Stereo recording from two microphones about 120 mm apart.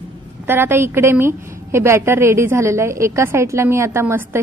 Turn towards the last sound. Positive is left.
turn(degrees=-20)  # may be behind; listen again after turning